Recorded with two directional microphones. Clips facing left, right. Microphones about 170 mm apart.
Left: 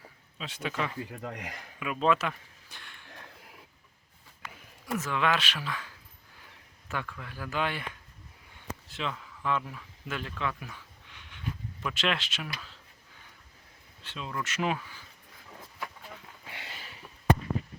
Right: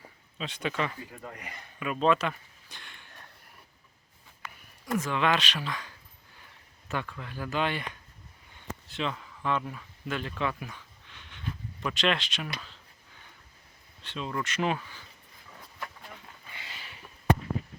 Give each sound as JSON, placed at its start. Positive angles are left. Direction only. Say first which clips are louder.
{"t": 0.3, "sound": "speech", "louder": "right 2 dB", "side_deg": 5}
{"t": 1.2, "sound": "speech", "louder": "left 4 dB", "side_deg": 85}
{"t": 1.8, "sound": "speech", "louder": "right 1 dB", "side_deg": 5}
{"t": 4.9, "sound": "speech", "louder": "right 2 dB", "side_deg": 5}
{"t": 6.9, "sound": "speech", "louder": "right 2 dB", "side_deg": 0}
{"t": 8.9, "sound": "speech", "louder": "right 3 dB", "side_deg": 0}
{"t": 11.1, "sound": "a sound", "louder": "even", "side_deg": 10}
{"t": 14.0, "sound": "speech", "louder": "right 3 dB", "side_deg": 5}
{"t": 16.5, "sound": "a sound", "louder": "left 3 dB", "side_deg": 65}